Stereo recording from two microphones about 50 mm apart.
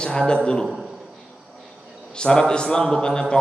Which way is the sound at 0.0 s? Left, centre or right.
Centre.